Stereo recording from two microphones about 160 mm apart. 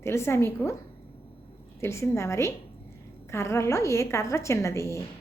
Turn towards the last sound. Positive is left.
turn(degrees=20)  # may be behind; listen again after turning